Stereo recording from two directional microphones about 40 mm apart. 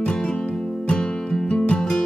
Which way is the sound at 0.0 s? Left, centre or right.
Left.